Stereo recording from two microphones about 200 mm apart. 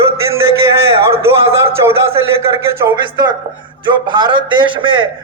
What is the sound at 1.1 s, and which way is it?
A man's voice, 15° right (ahead or behind).